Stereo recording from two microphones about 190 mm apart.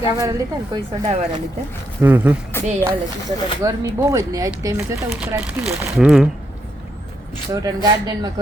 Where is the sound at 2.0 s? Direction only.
10° right (ahead or behind).